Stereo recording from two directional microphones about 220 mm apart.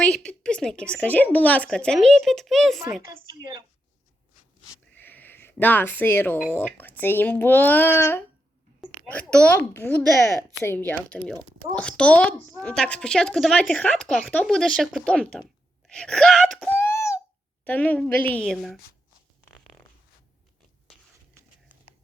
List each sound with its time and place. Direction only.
0.3 s speech: 5° left (ahead or behind)
3.2 s a woman's voice: 20° right (ahead or behind)
4.7 s a woman's voice: 10° left (ahead or behind)
16.8 s a sound: 10° left (ahead or behind)
17.7 s a woman's voice: 5° left (ahead or behind)